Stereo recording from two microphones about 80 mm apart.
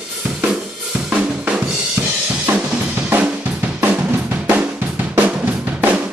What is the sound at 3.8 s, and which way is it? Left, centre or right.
Drum, right.